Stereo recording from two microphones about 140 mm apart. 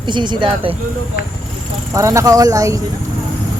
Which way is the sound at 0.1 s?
35° right (ahead or behind).